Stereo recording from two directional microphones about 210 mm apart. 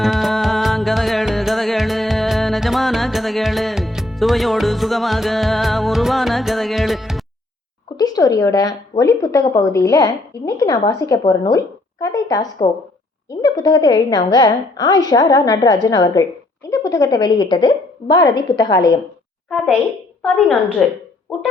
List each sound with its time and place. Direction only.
0.0 s music: centre (ahead or behind)
7.9 s a woman's voice: 20° left (ahead or behind)
19.5 s a woman's voice: centre (ahead or behind)